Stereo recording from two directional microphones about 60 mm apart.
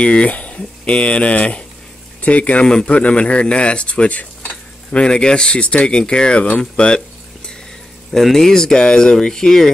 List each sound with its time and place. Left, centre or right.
0.0 s speech: centre
8.1 s speech: centre